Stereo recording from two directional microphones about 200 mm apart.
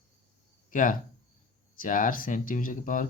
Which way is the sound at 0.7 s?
40° left (ahead or behind).